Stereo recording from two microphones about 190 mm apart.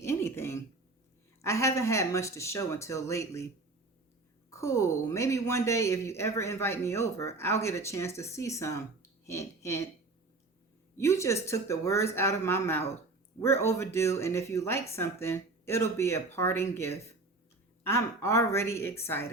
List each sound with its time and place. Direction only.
0.0 s a sound: 15° left (ahead or behind)
1.4 s a woman's voice: 15° left (ahead or behind)
4.5 s a woman's voice: 15° left (ahead or behind)
10.9 s a woman's voice: 15° left (ahead or behind)